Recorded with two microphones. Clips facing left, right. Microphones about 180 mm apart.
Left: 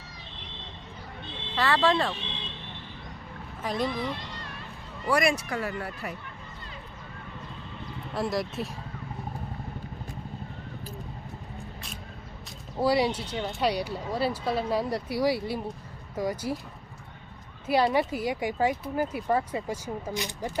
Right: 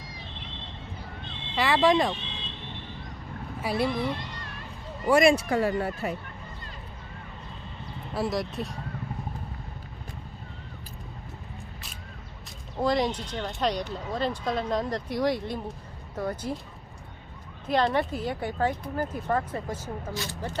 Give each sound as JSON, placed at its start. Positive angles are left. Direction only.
{"t": 1.5, "sound": "speech", "side_deg": -15}
{"t": 3.6, "sound": "speech", "side_deg": -10}
{"t": 5.0, "sound": "speech", "side_deg": -25}
{"t": 8.1, "sound": "speech", "side_deg": 0}
{"t": 12.7, "sound": "speech", "side_deg": 10}
{"t": 17.7, "sound": "speech", "side_deg": 10}